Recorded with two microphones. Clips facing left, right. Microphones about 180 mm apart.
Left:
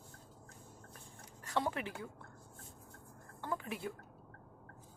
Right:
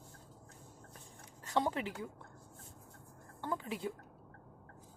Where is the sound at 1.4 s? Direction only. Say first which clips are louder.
Right 3 dB; 20° right (ahead or behind).